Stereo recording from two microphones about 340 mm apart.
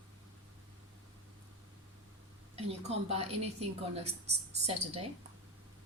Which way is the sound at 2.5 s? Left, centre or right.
Centre.